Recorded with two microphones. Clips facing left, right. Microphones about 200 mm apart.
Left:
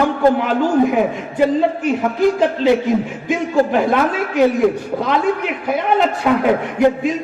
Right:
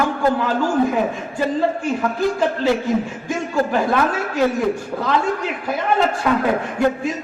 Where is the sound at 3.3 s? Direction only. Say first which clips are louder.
Left 5 dB; 20° left (ahead or behind).